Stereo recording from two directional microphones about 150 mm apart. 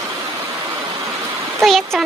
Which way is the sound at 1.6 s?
Centre (ahead or behind).